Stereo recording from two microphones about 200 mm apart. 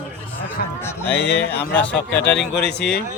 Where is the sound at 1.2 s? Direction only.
55° left (ahead or behind).